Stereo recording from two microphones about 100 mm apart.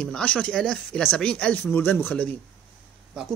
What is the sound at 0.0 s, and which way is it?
Speech, 10° left (ahead or behind).